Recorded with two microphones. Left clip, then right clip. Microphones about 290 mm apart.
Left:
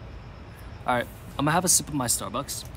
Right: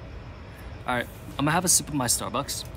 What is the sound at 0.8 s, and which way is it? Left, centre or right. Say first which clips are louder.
Speech: left 2 dB; centre.